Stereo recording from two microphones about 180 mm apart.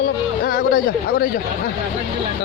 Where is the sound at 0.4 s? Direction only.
55° left (ahead or behind).